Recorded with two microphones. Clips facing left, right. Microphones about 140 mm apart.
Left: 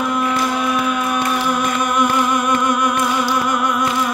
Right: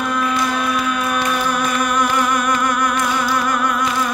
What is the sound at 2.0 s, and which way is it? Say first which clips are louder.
Music: left 3 dB; 20° left (ahead or behind).